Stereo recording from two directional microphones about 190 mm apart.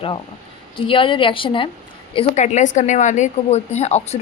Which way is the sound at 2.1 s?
40° left (ahead or behind).